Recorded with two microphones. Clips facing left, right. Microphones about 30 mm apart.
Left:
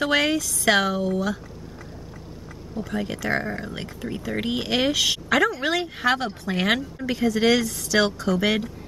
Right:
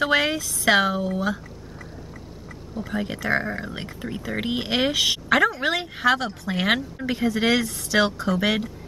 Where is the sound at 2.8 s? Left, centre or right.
Centre.